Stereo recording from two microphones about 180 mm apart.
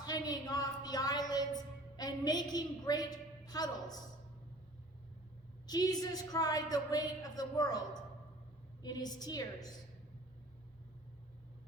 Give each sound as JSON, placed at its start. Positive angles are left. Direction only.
{"t": 0.0, "sound": "a sound", "side_deg": 20}
{"t": 5.6, "sound": "a woman's voice", "side_deg": 20}
{"t": 8.8, "sound": "a woman's voice", "side_deg": 20}